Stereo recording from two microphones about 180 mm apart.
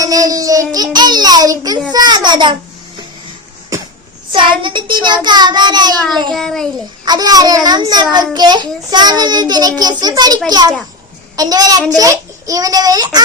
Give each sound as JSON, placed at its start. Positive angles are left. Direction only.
{"t": 0.0, "sound": "a child's voice", "side_deg": -20}
{"t": 3.7, "sound": "a sound", "side_deg": -20}
{"t": 4.3, "sound": "a child's voice", "side_deg": -25}
{"t": 6.3, "sound": "a child's voice", "side_deg": 0}
{"t": 7.0, "sound": "a child's voice", "side_deg": -20}